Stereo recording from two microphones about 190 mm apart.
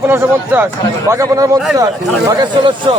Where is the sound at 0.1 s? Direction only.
10° right (ahead or behind).